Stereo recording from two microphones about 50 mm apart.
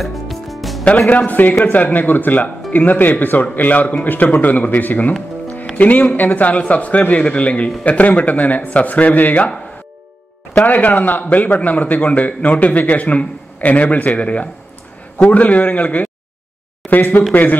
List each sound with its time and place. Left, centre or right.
0.0 s music: centre
1.1 s a man's voice: left
10.6 s a man's voice: left